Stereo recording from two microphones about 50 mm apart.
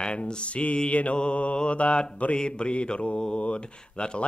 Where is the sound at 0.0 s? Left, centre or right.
Left.